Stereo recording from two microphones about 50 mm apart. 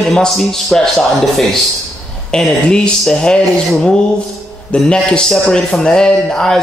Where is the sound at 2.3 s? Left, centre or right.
Centre.